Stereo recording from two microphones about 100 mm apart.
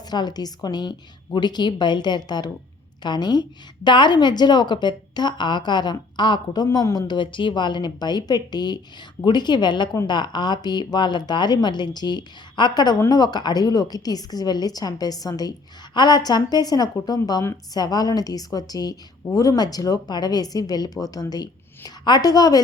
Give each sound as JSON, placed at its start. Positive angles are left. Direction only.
{"t": 0.1, "sound": "a woman's voice", "side_deg": 45}